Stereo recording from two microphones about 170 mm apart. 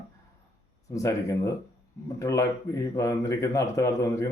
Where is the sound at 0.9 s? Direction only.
20° left (ahead or behind).